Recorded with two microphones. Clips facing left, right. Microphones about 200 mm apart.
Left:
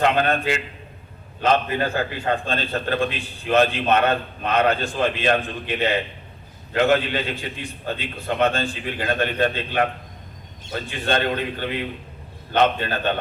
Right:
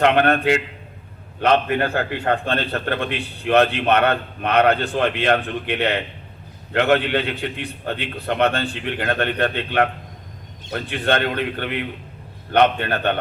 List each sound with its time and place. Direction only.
0.0 s a man's voice: 65° right (ahead or behind)